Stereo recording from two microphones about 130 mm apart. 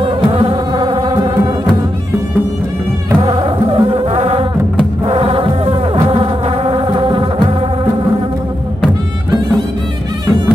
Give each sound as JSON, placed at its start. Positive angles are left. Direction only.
{"t": 0.0, "sound": "music", "side_deg": -45}
{"t": 3.3, "sound": "insect", "side_deg": -45}